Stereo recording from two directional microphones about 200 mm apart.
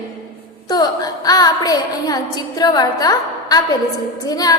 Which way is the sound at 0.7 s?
20° left (ahead or behind).